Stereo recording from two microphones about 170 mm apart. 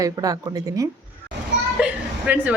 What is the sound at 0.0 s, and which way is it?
Speech, 20° right (ahead or behind).